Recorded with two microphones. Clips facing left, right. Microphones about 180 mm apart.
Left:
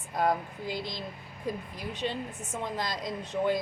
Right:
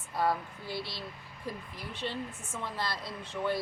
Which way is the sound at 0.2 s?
15° left (ahead or behind).